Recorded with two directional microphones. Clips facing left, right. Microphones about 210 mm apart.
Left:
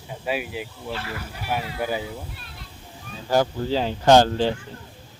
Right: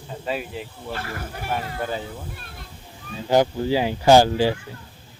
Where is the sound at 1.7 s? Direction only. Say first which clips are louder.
Left 1 dB; 10° left (ahead or behind).